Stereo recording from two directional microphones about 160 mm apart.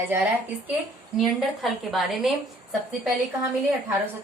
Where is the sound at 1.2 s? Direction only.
Centre (ahead or behind).